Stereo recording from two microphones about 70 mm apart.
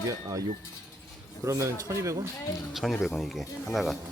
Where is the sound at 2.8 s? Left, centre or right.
Centre.